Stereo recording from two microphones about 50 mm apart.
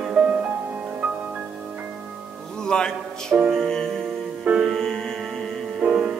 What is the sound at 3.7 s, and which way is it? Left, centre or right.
Music, centre.